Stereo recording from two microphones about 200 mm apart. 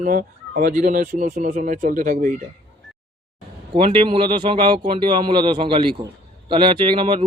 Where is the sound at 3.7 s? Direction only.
25° right (ahead or behind).